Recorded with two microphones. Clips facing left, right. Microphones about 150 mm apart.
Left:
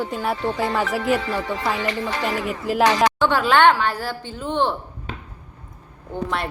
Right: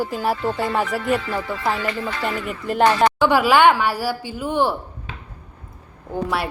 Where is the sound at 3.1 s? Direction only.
10° right (ahead or behind).